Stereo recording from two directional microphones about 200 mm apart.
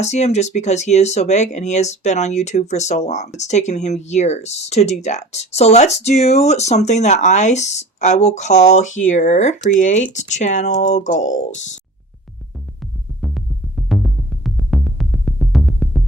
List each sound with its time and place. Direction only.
0.0 s speech: 35° left (ahead or behind)
13.2 s music: centre (ahead or behind)